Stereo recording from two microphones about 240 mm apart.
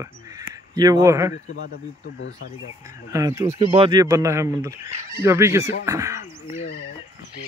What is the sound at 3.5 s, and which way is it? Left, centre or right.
Speech, right.